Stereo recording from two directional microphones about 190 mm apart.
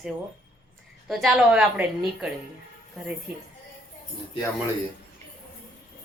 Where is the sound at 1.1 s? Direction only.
Centre (ahead or behind).